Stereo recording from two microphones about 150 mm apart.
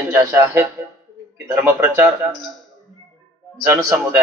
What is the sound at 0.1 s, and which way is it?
A man's voice, 15° right (ahead or behind).